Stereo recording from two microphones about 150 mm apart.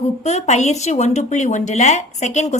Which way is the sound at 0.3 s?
50° left (ahead or behind).